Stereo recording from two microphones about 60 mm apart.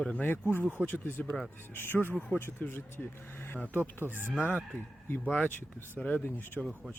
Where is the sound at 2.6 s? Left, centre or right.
Left.